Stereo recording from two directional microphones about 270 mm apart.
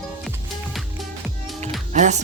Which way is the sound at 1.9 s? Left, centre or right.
Right.